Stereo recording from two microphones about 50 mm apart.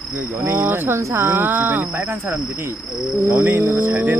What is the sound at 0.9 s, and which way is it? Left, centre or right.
Speech, right.